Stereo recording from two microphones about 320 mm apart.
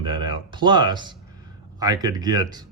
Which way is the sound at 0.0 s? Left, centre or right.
Centre.